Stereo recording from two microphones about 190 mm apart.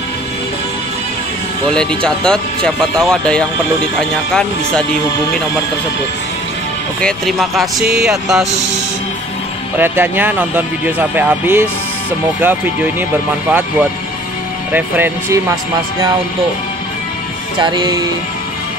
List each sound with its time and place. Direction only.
1.7 s speech: 5° left (ahead or behind)
7.0 s speech: centre (ahead or behind)
9.8 s speech: 10° right (ahead or behind)
17.6 s music: 25° right (ahead or behind)